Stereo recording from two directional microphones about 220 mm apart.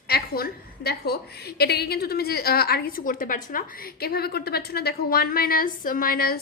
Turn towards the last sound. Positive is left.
turn(degrees=40)  # may be behind; listen again after turning